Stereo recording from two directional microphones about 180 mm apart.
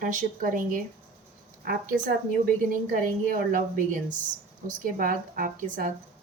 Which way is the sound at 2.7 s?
50° right (ahead or behind).